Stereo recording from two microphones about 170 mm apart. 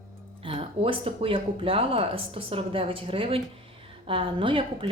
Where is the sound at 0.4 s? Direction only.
35° right (ahead or behind).